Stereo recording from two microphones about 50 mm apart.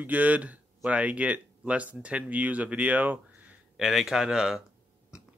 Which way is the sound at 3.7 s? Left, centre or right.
Centre.